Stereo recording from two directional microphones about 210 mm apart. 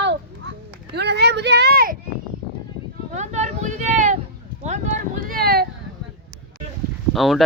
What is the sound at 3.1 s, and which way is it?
Speech, 35° right (ahead or behind).